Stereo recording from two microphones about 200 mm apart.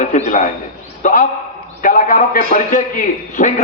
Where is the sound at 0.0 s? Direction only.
40° left (ahead or behind).